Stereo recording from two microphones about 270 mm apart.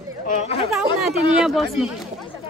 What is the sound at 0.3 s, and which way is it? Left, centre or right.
Speech, left.